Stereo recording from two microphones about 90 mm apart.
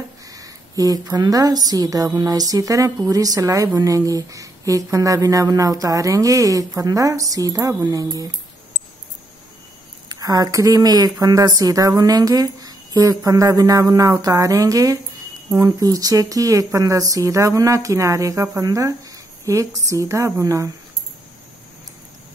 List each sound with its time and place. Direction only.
0.3 s a woman's voice: 40° right (ahead or behind)
10.0 s a woman's voice: 45° right (ahead or behind)